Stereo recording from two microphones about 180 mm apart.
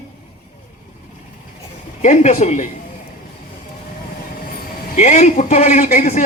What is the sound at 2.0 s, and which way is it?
Speech, 40° left (ahead or behind).